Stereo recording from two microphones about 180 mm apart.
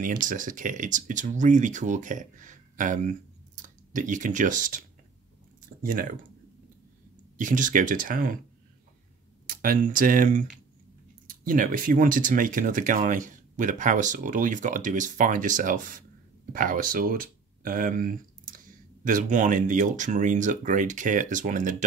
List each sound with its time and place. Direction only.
0.3 s speech: 45° right (ahead or behind)
7.3 s speech: 45° right (ahead or behind)
9.5 s speech: 50° right (ahead or behind)